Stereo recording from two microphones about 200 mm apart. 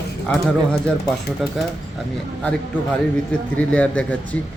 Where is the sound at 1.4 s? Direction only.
Centre (ahead or behind).